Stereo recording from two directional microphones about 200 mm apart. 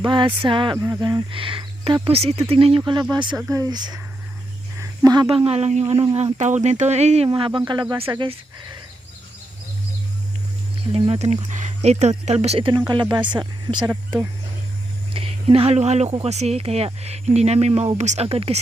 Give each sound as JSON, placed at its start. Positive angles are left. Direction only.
{"t": 0.0, "sound": "speech", "side_deg": -25}
{"t": 10.9, "sound": "speech", "side_deg": -30}
{"t": 15.1, "sound": "speech", "side_deg": -30}